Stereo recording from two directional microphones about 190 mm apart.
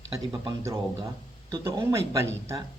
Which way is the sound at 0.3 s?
15° right (ahead or behind).